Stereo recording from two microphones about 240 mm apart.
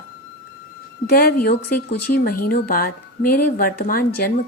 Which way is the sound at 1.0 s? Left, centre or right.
Left.